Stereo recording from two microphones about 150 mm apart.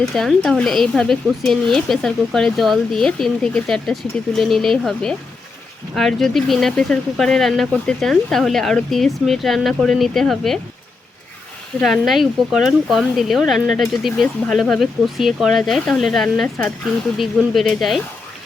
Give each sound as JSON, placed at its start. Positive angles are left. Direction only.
{"t": 0.0, "sound": "speech", "side_deg": 0}
{"t": 11.8, "sound": "speech", "side_deg": 0}